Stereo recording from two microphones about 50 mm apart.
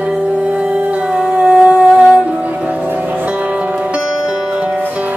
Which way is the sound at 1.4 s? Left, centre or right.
Centre.